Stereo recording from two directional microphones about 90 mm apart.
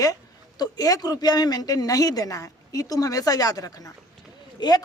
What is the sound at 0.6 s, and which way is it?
Speech, 45° left (ahead or behind).